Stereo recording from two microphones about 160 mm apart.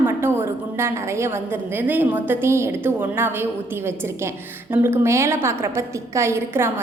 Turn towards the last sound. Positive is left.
turn(degrees=-15)  # may be behind; listen again after turning